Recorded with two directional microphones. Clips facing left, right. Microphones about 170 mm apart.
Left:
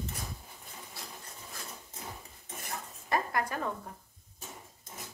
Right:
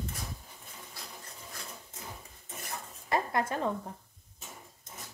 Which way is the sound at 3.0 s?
25° right (ahead or behind).